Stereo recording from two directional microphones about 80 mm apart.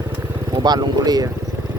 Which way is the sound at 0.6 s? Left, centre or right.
Right.